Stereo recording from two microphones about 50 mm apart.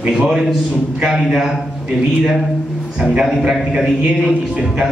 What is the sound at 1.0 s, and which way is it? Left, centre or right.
Speech, centre.